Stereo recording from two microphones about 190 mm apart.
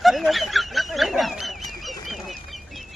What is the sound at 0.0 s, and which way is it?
Fowl, centre (ahead or behind).